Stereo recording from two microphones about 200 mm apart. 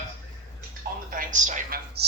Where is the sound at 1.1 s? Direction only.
40° right (ahead or behind).